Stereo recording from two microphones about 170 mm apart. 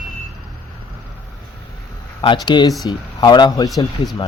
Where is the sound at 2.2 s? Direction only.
30° left (ahead or behind).